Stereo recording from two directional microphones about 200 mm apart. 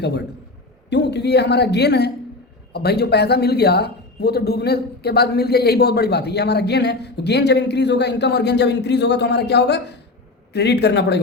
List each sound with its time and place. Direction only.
0.0 s speech: 55° left (ahead or behind)